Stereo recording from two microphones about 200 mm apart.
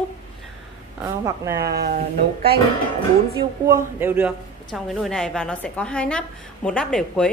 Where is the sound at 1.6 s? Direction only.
50° right (ahead or behind).